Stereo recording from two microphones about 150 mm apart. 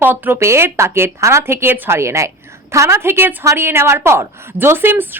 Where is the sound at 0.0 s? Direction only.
15° right (ahead or behind).